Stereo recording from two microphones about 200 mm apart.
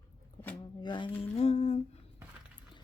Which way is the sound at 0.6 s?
20° left (ahead or behind).